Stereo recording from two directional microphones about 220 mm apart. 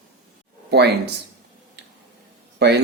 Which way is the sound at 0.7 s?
50° right (ahead or behind).